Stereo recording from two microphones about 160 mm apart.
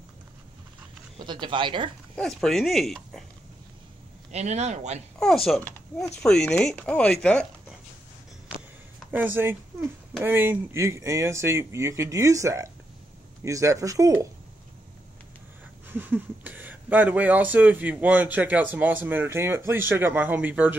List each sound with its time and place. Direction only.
1.1 s speech: 30° right (ahead or behind)
2.1 s speech: centre (ahead or behind)
4.3 s speech: 45° right (ahead or behind)
5.2 s speech: centre (ahead or behind)
9.1 s speech: 15° right (ahead or behind)
15.9 s speech: 10° right (ahead or behind)